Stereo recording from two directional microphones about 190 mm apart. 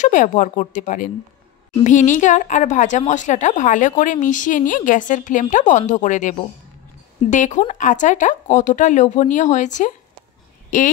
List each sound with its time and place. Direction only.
0.0 s a woman's voice: 40° left (ahead or behind)